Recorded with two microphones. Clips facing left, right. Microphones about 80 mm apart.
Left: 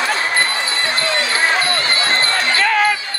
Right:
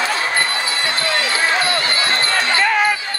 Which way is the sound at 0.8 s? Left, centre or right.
Left.